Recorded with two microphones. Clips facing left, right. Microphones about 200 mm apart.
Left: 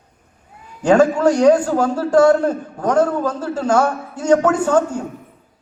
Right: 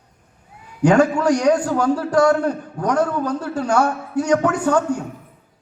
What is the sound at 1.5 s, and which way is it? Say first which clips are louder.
A man's voice: left 1 dB; 25° left (ahead or behind).